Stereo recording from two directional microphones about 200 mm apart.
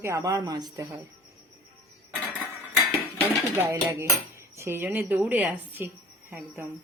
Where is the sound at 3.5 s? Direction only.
15° right (ahead or behind).